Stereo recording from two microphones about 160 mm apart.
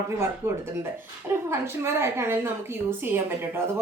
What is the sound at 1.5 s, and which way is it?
A woman's voice, 15° right (ahead or behind).